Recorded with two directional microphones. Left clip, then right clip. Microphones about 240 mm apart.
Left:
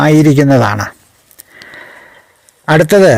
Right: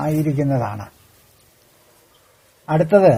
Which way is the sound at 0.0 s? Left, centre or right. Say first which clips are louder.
Left 13 dB; left.